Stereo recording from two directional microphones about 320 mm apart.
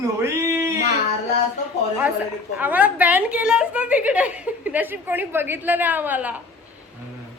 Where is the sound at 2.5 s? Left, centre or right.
Centre.